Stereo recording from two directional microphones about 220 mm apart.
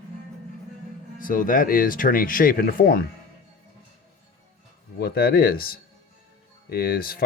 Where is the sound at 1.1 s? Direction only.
40° left (ahead or behind).